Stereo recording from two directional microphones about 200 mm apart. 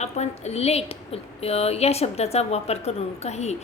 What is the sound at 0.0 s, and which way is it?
A woman's voice, 35° left (ahead or behind).